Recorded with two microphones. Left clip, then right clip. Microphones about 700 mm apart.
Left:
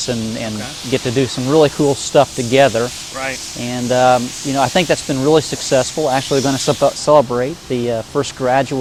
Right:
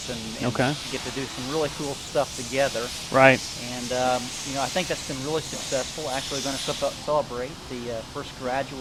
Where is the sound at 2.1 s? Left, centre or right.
Left.